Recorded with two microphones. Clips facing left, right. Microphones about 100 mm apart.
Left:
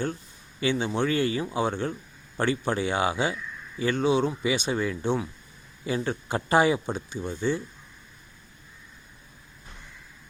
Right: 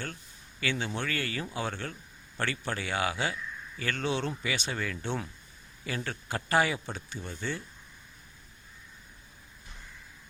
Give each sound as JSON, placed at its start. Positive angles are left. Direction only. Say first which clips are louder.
{"t": 0.6, "sound": "speech", "louder": "left 7 dB", "side_deg": 20}